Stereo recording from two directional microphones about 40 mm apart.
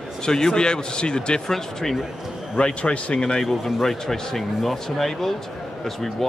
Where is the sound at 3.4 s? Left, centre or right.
Centre.